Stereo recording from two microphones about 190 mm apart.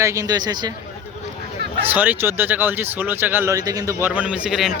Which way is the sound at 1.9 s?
10° right (ahead or behind).